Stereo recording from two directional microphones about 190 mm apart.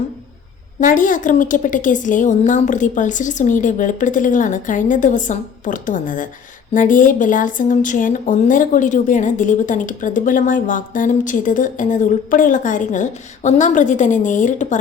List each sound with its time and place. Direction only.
0.8 s speech: 45° left (ahead or behind)